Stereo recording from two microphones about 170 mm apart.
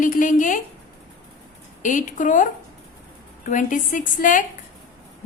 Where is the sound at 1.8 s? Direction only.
50° left (ahead or behind).